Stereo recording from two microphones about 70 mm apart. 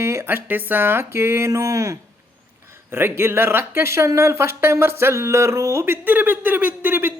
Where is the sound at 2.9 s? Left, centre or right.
Right.